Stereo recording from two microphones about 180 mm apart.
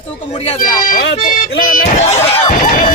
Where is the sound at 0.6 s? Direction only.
50° left (ahead or behind).